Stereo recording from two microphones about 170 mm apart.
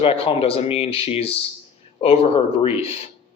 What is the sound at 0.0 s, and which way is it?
Speech, 35° left (ahead or behind).